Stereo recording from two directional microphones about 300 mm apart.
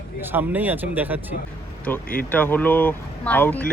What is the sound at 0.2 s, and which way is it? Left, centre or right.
Speech, centre.